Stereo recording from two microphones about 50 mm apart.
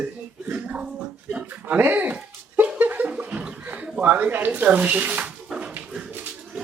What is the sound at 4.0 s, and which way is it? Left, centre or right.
Speech, right.